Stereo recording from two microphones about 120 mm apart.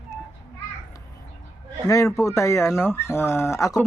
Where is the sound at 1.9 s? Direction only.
25° left (ahead or behind).